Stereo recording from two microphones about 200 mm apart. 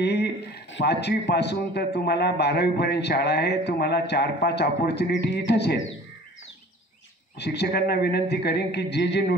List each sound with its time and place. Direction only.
0.0 s a man's voice: 55° left (ahead or behind)
7.3 s a man's voice: 55° left (ahead or behind)